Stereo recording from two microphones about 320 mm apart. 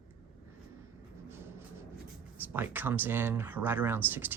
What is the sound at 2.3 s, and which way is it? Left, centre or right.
Speech, centre.